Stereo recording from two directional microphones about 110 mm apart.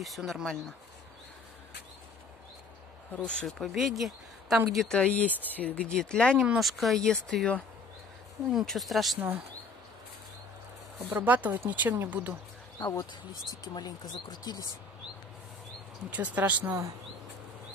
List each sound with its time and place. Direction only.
0.0 s speech: centre (ahead or behind)
3.1 s speech: 10° left (ahead or behind)
6.3 s speech: 10° right (ahead or behind)
11.0 s speech: 20° right (ahead or behind)
12.7 s speech: 35° left (ahead or behind)
16.1 s speech: 15° right (ahead or behind)